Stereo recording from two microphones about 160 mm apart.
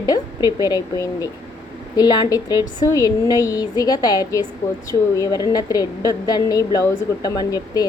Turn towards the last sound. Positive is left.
turn(degrees=25)  # may be behind; listen again after turning